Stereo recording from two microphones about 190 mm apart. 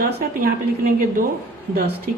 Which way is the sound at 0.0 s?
50° right (ahead or behind).